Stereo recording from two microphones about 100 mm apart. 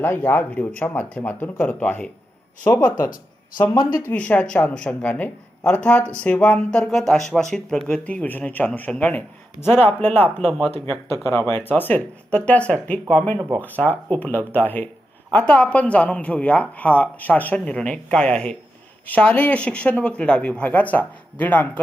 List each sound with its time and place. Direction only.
0.0 s speech: 20° left (ahead or behind)
4.0 s speech: 15° left (ahead or behind)